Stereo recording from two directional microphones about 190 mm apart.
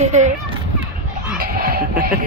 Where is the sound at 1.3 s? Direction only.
50° right (ahead or behind).